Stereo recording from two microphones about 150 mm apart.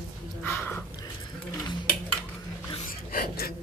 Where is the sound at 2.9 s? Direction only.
75° left (ahead or behind).